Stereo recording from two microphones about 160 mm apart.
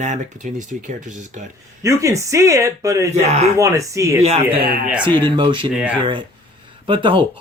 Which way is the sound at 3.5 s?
20° right (ahead or behind).